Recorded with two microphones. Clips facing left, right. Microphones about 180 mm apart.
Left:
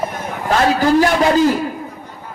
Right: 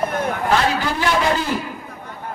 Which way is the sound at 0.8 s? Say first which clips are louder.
Left 9 dB; 40° left (ahead or behind).